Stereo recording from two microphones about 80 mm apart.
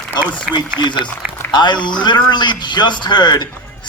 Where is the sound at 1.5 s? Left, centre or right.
Left.